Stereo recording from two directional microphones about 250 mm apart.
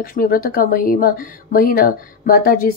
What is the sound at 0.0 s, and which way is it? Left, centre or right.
Speech, left.